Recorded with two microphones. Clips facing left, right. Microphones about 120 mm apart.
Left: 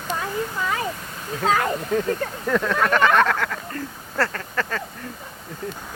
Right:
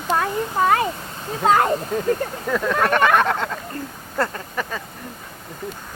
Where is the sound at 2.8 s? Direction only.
35° right (ahead or behind).